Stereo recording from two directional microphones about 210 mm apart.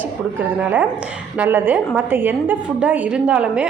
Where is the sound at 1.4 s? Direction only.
10° right (ahead or behind).